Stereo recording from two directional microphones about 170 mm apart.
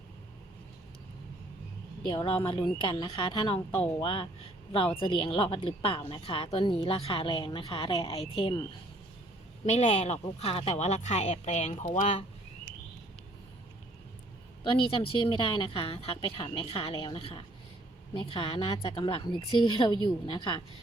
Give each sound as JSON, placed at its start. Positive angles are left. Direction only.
{"t": 2.0, "sound": "a woman's voice", "side_deg": 30}
{"t": 9.6, "sound": "a woman's voice", "side_deg": 40}
{"t": 14.6, "sound": "a woman's voice", "side_deg": 30}